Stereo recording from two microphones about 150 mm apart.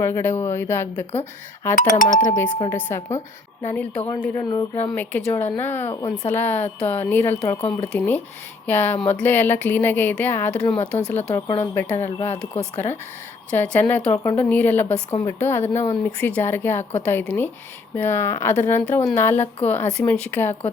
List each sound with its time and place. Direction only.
0.0 s speech: 15° left (ahead or behind)
1.7 s speech: 65° left (ahead or behind)
2.6 s speech: 15° left (ahead or behind)
4.9 s speech: 10° left (ahead or behind)
5.9 s speech: 30° left (ahead or behind)
6.2 s speech: 15° left (ahead or behind)